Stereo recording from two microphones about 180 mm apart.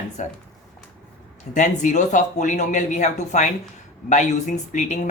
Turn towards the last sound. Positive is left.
turn(degrees=45)  # may be behind; listen again after turning